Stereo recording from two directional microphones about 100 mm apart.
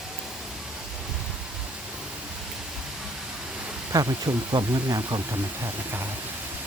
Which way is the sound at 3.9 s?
40° right (ahead or behind).